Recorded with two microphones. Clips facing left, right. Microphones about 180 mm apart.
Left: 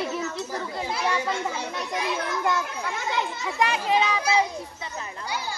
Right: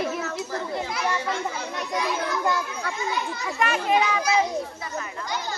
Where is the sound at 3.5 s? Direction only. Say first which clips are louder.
Right 1 dB; 15° left (ahead or behind).